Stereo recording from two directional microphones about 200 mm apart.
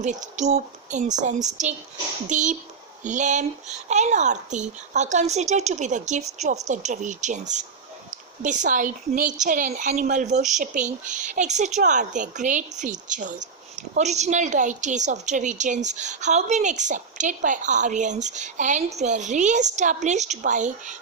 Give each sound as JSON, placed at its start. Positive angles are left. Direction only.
{"t": 0.0, "sound": "speech", "side_deg": -35}